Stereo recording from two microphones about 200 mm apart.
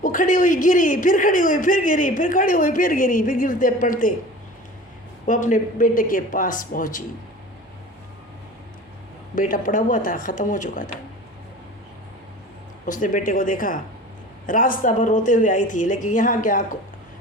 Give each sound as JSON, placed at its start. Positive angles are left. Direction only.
{"t": 0.0, "sound": "a man's voice", "side_deg": 40}
{"t": 5.2, "sound": "speech", "side_deg": 40}
{"t": 9.3, "sound": "a man's voice", "side_deg": 40}
{"t": 12.8, "sound": "a man's voice", "side_deg": 40}